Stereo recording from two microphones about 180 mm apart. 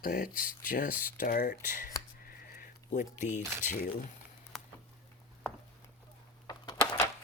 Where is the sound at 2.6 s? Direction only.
45° left (ahead or behind).